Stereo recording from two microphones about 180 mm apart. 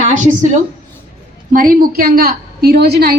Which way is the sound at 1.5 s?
50° right (ahead or behind).